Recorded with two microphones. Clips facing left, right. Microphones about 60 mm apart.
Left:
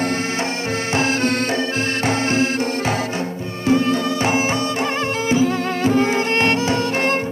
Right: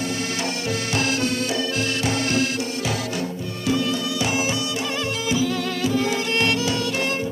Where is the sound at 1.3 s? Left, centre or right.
Left.